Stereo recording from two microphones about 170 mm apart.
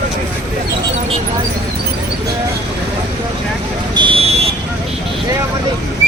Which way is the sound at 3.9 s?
30° right (ahead or behind).